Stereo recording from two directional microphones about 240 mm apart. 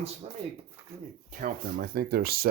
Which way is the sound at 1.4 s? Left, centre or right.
Right.